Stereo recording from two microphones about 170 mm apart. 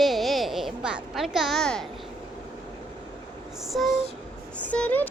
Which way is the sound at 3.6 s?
Centre (ahead or behind).